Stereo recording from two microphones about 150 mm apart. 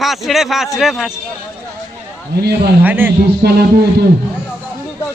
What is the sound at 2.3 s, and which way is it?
Speech, 90° right.